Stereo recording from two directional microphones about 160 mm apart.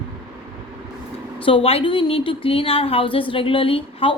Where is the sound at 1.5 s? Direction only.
35° left (ahead or behind).